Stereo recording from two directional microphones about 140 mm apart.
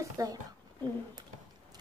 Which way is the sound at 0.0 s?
25° right (ahead or behind).